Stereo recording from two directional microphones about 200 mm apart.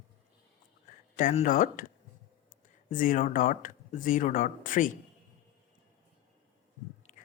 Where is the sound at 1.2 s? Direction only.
40° left (ahead or behind).